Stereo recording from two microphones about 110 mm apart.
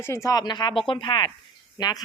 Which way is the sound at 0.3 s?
40° left (ahead or behind).